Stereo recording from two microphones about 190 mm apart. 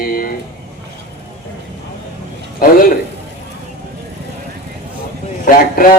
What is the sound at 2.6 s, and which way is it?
Speech, 50° left (ahead or behind).